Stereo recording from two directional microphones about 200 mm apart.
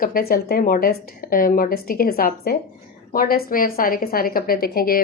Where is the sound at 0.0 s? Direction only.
45° left (ahead or behind).